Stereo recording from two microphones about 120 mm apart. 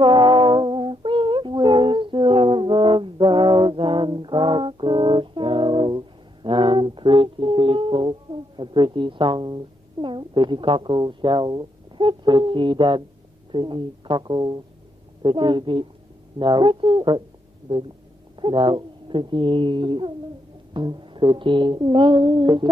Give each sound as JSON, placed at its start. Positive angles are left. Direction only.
{"t": 0.0, "sound": "music", "side_deg": -40}
{"t": 10.0, "sound": "a sound", "side_deg": -40}
{"t": 13.5, "sound": "music", "side_deg": -40}
{"t": 15.2, "sound": "speech", "side_deg": -40}
{"t": 16.3, "sound": "music", "side_deg": -40}
{"t": 18.4, "sound": "speech", "side_deg": -45}
{"t": 20.7, "sound": "music", "side_deg": -40}